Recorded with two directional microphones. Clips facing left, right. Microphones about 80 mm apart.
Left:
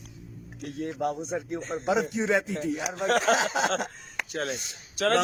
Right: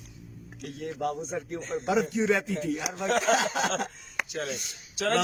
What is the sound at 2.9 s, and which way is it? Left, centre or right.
Speech, left.